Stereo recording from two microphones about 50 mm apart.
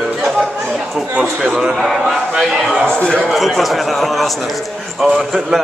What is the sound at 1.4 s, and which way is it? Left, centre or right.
A man's voice, centre.